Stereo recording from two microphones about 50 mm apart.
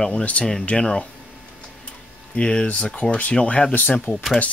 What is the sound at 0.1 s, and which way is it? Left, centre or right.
Speech, left.